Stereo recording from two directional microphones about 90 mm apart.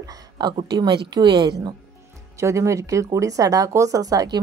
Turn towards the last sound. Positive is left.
turn(degrees=-45)  # may be behind; listen again after turning